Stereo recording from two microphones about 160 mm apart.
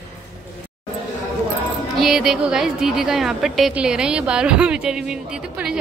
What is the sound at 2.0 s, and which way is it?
A woman's voice, centre (ahead or behind).